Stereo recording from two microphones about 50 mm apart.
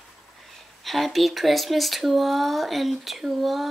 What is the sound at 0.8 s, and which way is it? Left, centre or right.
Speech, centre.